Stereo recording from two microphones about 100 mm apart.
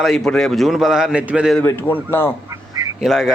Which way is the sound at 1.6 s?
20° left (ahead or behind).